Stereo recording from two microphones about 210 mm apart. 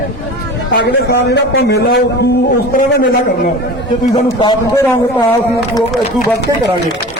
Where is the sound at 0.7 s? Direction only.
50° left (ahead or behind).